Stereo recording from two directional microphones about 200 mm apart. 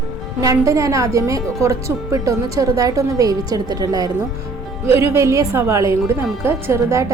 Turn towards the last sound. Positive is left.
turn(degrees=-15)  # may be behind; listen again after turning